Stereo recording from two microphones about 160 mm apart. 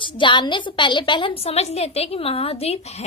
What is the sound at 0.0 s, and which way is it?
A woman's voice, 30° left (ahead or behind).